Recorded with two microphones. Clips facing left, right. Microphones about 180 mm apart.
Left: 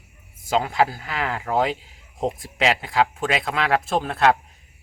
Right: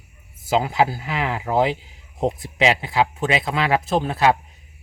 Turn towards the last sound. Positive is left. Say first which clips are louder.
# right 1 dB
turn(degrees=0)  # may be behind; listen again after turning